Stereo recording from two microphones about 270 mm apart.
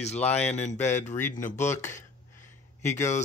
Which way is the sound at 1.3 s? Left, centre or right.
Left.